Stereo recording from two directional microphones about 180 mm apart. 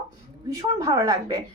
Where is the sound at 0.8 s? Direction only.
20° right (ahead or behind).